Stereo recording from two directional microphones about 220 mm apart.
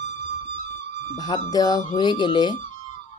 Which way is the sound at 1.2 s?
20° left (ahead or behind).